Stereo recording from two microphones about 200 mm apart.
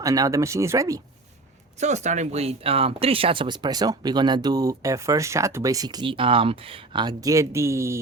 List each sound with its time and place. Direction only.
0.0 s speech: 15° right (ahead or behind)
1.8 s speech: 35° right (ahead or behind); by 8.0 s 15° right (ahead or behind)